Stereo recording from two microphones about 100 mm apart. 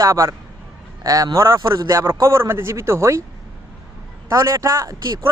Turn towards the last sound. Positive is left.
turn(degrees=-30)  # may be behind; listen again after turning